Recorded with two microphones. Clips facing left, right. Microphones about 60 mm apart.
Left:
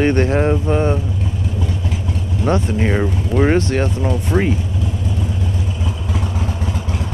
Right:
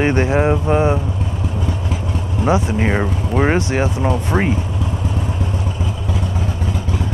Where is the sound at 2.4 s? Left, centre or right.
Centre.